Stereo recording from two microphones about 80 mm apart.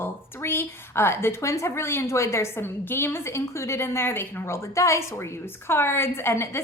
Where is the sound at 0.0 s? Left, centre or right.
Left.